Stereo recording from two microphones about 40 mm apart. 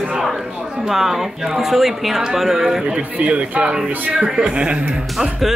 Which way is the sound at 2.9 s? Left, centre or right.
Right.